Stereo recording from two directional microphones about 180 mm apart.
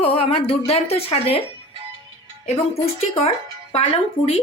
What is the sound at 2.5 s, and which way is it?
Speech, 35° left (ahead or behind).